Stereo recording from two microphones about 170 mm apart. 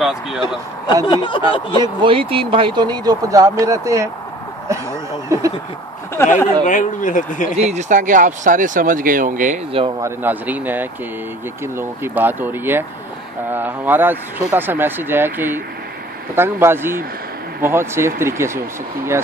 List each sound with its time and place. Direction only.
0.0 s a man's voice: centre (ahead or behind)
1.0 s speech: 30° left (ahead or behind)
1.8 s speech: 30° right (ahead or behind)
5.3 s speech: 20° right (ahead or behind)
6.3 s speech: 50° left (ahead or behind)
7.5 s speech: 45° right (ahead or behind)
9.7 s speech: 30° right (ahead or behind)
10.0 s speech: 10° right (ahead or behind)